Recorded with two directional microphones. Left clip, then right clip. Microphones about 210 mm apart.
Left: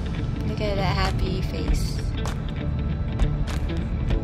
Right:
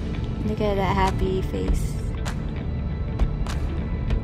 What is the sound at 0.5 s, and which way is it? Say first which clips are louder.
Speech: right 3 dB; 25° right (ahead or behind).